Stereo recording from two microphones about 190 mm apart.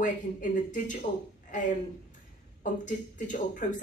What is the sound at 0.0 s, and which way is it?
Speech, 40° left (ahead or behind).